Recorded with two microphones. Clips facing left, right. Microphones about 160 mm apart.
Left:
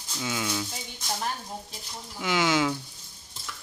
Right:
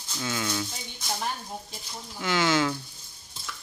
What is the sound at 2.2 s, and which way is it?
Speech, 10° left (ahead or behind).